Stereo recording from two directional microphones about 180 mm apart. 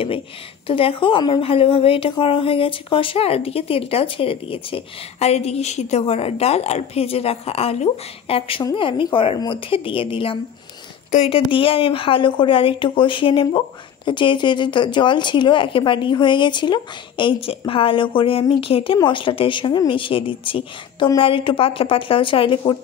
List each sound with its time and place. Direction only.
0.7 s speech: 30° left (ahead or behind)